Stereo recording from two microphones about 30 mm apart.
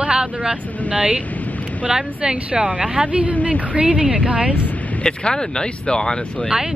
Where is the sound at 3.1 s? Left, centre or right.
Right.